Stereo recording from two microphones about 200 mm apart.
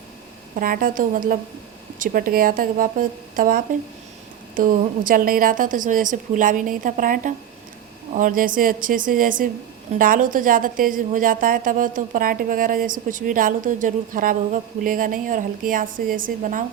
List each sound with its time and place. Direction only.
0.5 s a woman's voice: 45° right (ahead or behind)